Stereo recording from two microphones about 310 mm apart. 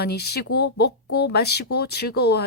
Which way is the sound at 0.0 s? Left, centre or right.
Left.